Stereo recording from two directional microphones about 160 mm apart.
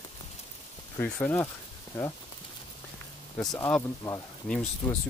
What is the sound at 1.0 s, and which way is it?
Speech, 10° left (ahead or behind).